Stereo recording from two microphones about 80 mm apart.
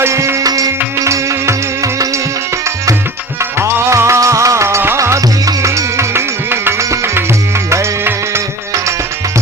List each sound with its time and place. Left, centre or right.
0.0 s music: right
3.6 s music: right